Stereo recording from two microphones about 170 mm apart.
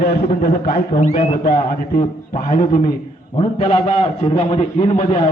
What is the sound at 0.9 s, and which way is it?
Speech, 40° left (ahead or behind).